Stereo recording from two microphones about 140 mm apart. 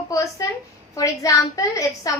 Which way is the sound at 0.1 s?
25° left (ahead or behind).